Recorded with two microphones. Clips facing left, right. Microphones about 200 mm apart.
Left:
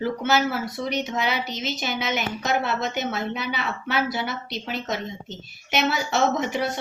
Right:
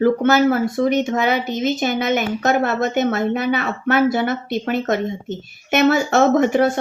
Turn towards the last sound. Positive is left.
turn(degrees=-50)  # may be behind; listen again after turning